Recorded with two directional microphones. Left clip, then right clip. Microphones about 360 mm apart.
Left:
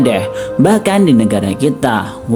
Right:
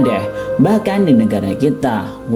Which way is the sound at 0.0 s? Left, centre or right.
Centre.